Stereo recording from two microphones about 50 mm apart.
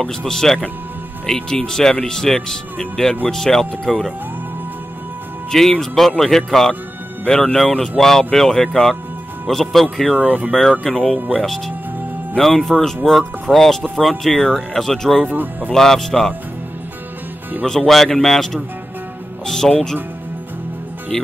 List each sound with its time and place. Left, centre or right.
0.0 s speech: centre
5.5 s speech: centre
12.4 s speech: centre
15.2 s speech: right
15.7 s speech: centre
17.6 s speech: centre